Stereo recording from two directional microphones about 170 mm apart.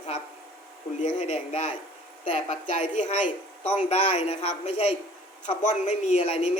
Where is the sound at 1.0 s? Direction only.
45° left (ahead or behind).